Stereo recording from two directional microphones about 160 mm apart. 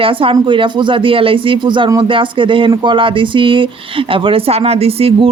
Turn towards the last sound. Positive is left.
turn(degrees=-35)  # may be behind; listen again after turning